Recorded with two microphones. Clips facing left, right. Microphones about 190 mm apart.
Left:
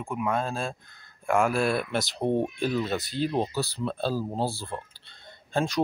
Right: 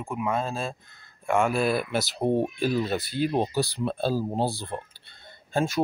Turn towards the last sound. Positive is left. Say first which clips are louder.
# right 1 dB
turn(degrees=-5)  # may be behind; listen again after turning